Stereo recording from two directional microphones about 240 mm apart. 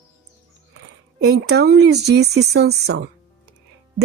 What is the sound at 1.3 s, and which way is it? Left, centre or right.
Speech, right.